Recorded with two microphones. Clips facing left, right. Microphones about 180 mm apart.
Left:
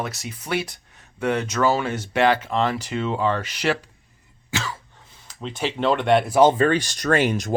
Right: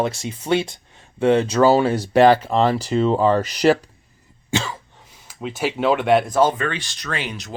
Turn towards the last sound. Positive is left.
turn(degrees=45)  # may be behind; listen again after turning